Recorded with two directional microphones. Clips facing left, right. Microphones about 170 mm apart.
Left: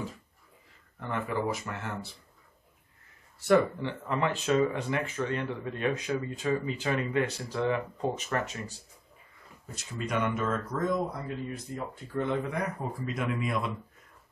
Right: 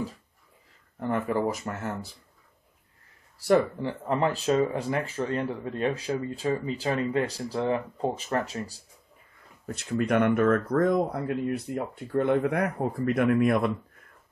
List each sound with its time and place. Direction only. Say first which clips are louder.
0.9 s speech: right 5 dB; 40° right (ahead or behind)
3.3 s speech: right 1 dB; 35° right (ahead or behind)
9.7 s speech: right 9 dB; 60° right (ahead or behind)